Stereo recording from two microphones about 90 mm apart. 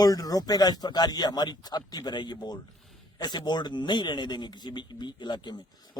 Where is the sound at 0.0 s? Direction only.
45° left (ahead or behind).